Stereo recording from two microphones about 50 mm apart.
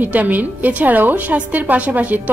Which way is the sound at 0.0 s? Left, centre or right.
Right.